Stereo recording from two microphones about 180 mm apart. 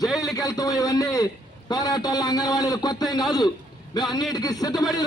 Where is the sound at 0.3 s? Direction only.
20° left (ahead or behind).